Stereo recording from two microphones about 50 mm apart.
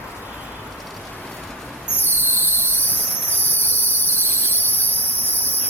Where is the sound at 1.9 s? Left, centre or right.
Left.